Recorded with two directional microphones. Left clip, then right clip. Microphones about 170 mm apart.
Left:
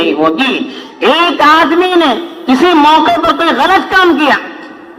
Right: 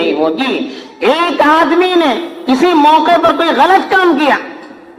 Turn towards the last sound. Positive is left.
turn(degrees=30)  # may be behind; listen again after turning